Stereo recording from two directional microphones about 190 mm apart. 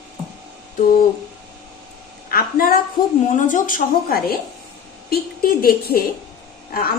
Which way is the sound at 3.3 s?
40° left (ahead or behind).